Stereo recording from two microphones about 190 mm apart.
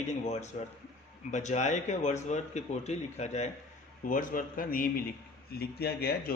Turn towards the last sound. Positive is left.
turn(degrees=55)  # may be behind; listen again after turning